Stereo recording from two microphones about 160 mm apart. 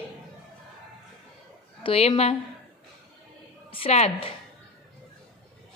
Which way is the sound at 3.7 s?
40° left (ahead or behind).